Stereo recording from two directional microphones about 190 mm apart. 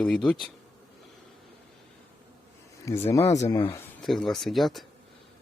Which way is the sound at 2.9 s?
15° left (ahead or behind).